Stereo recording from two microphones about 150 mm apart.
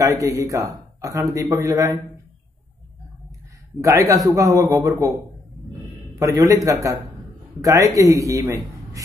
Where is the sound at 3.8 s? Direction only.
20° right (ahead or behind).